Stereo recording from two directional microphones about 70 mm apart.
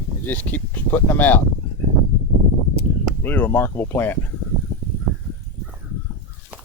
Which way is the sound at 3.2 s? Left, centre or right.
Left.